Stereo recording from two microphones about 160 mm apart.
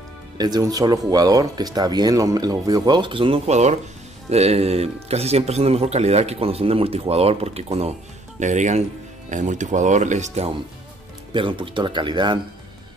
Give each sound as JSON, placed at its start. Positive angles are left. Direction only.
{"t": 0.4, "sound": "speech", "side_deg": -25}
{"t": 11.3, "sound": "speech", "side_deg": -30}